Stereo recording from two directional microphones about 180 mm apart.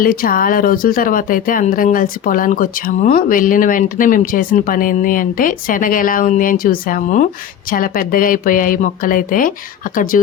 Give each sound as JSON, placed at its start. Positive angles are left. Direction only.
{"t": 0.0, "sound": "speech", "side_deg": 55}